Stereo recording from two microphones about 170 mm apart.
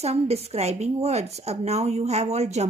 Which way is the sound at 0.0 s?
40° right (ahead or behind).